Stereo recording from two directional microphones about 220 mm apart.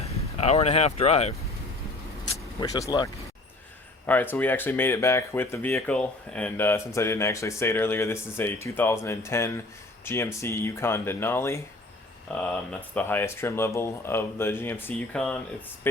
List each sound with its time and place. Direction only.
0.3 s speech: 30° left (ahead or behind)
2.6 s speech: 15° left (ahead or behind)